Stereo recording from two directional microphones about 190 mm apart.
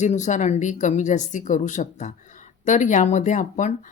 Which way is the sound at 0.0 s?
40° left (ahead or behind).